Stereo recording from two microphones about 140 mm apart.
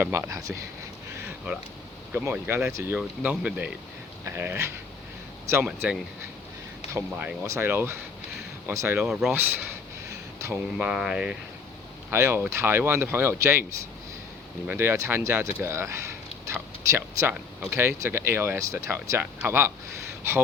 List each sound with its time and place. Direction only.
0.0 s speech: 15° right (ahead or behind)
2.1 s speech: 15° right (ahead or behind)
5.6 s speech: 5° right (ahead or behind)
6.9 s speech: 15° right (ahead or behind)
9.0 s speech: centre (ahead or behind)
9.3 s a sound: 15° right (ahead or behind)
10.8 s speech: 5° right (ahead or behind)
12.1 s speech: 15° right (ahead or behind)
14.7 s speech: 15° right (ahead or behind)
17.3 s speech: 10° right (ahead or behind)